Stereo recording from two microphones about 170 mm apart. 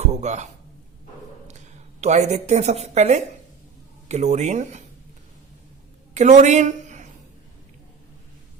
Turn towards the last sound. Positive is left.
turn(degrees=-45)  # may be behind; listen again after turning